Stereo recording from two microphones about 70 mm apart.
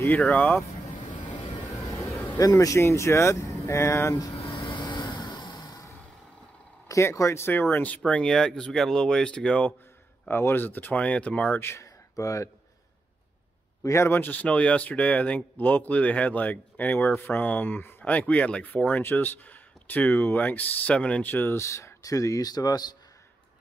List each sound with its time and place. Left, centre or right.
0.3 s speech: left
1.9 s a sound: left
2.3 s speech: left
4.7 s vehicle: left
6.9 s speech: left
7.7 s speech: left
10.2 s speech: left
11.6 s a sound: left
13.8 s speech: left
21.5 s speech: left